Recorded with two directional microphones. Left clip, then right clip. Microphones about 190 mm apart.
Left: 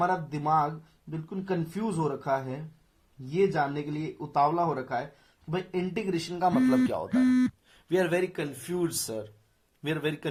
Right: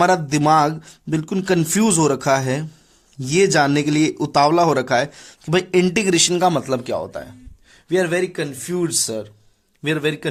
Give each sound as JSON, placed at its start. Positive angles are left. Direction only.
{"t": 0.0, "sound": "speech", "side_deg": -60}
{"t": 6.7, "sound": "speech", "side_deg": -30}